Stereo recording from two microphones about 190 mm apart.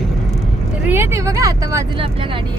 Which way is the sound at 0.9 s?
15° right (ahead or behind).